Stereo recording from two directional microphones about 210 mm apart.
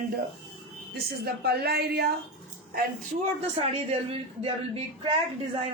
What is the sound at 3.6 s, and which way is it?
Speech, 25° right (ahead or behind).